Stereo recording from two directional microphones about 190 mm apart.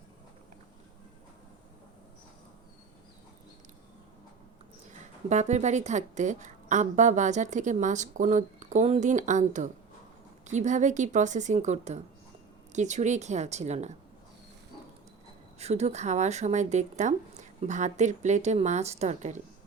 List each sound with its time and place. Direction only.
4.9 s speech: 40° right (ahead or behind)
15.5 s speech: 35° right (ahead or behind)